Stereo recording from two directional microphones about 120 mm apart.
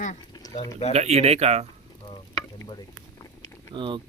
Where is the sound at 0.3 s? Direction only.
35° left (ahead or behind).